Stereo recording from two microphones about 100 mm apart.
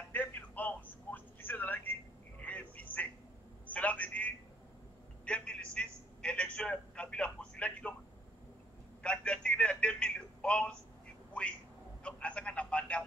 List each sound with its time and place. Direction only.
0.1 s telephone: 20° left (ahead or behind)
2.4 s a sound: 15° left (ahead or behind)
9.0 s telephone: 10° left (ahead or behind)
12.0 s telephone: 10° left (ahead or behind)